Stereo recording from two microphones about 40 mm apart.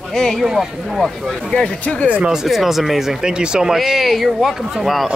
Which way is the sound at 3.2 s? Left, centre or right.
Centre.